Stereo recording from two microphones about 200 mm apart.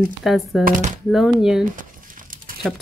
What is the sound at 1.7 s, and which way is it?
Crumpling, 40° right (ahead or behind).